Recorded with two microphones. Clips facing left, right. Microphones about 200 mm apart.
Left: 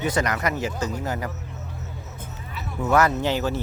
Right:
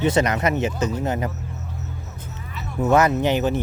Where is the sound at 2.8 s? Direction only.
20° right (ahead or behind).